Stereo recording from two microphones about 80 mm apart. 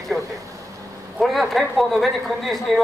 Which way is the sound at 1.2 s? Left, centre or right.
Centre.